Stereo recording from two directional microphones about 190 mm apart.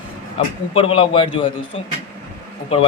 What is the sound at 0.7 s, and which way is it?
Speech, 30° left (ahead or behind).